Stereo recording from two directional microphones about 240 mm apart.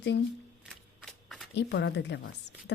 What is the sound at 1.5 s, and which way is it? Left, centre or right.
Speech, left.